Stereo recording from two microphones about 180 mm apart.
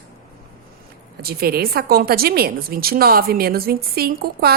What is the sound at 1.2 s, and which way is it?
A woman's voice, 60° right (ahead or behind).